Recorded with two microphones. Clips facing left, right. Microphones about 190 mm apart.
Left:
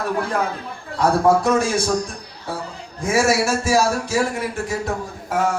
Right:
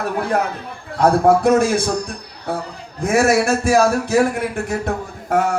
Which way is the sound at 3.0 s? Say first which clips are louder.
Right 3 dB; 60° right (ahead or behind).